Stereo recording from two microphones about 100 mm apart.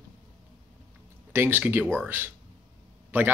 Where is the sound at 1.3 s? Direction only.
20° right (ahead or behind).